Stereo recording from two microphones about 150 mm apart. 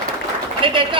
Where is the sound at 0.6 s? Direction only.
35° right (ahead or behind).